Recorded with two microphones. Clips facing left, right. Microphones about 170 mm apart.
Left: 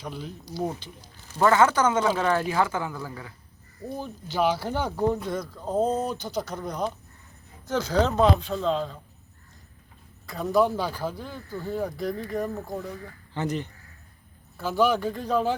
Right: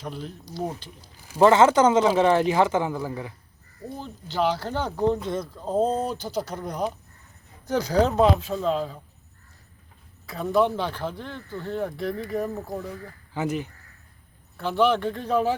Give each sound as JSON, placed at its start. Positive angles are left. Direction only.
{"t": 0.0, "sound": "speech", "side_deg": 0}
{"t": 1.4, "sound": "speech", "side_deg": -25}
{"t": 4.4, "sound": "speech", "side_deg": 15}
{"t": 5.2, "sound": "speech", "side_deg": -25}
{"t": 5.5, "sound": "speech", "side_deg": -5}
{"t": 5.8, "sound": "speech", "side_deg": -30}
{"t": 6.5, "sound": "speech", "side_deg": -10}
{"t": 10.2, "sound": "speech", "side_deg": 0}
{"t": 14.5, "sound": "speech", "side_deg": 5}